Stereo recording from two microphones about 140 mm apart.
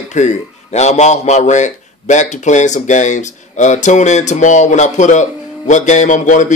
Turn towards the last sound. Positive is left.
turn(degrees=65)  # may be behind; listen again after turning